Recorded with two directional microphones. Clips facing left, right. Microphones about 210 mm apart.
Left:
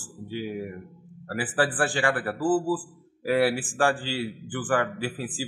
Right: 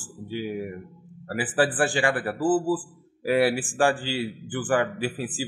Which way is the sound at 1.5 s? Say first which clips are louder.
Right 3 dB; 20° right (ahead or behind).